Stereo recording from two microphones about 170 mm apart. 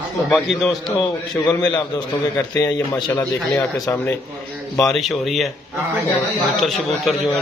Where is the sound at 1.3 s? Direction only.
20° left (ahead or behind).